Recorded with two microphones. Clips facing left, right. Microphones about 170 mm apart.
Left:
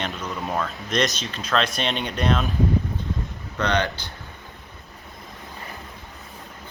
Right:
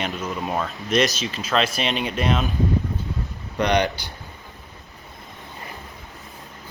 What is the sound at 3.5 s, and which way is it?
Speech, 15° right (ahead or behind).